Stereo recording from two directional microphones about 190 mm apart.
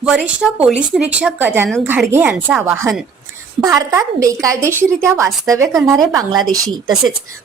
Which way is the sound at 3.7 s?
15° right (ahead or behind).